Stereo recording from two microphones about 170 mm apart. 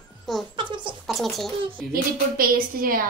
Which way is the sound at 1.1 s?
Centre (ahead or behind).